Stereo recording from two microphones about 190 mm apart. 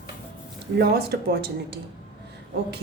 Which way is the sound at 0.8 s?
55° right (ahead or behind).